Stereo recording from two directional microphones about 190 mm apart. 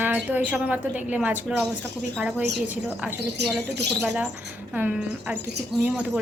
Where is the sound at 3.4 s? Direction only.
65° right (ahead or behind).